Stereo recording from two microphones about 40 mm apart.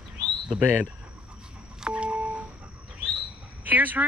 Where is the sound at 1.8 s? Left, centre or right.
Right.